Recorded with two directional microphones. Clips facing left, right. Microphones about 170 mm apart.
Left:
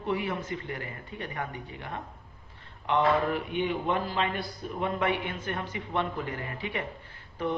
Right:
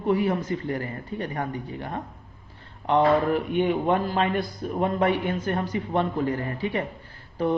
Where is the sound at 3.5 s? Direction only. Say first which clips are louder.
Right 8 dB; 50° right (ahead or behind).